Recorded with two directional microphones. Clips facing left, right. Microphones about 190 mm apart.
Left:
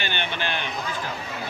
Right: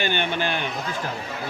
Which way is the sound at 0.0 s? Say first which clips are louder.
Right 5 dB; 45° right (ahead or behind).